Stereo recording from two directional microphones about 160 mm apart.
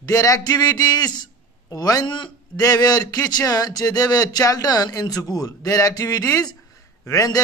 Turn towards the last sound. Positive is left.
turn(degrees=20)  # may be behind; listen again after turning